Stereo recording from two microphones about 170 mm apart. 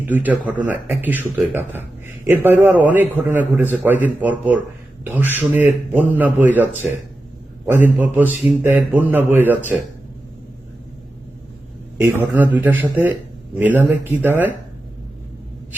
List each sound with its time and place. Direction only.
0.0 s a man's voice: 10° right (ahead or behind)
11.9 s a man's voice: 15° right (ahead or behind)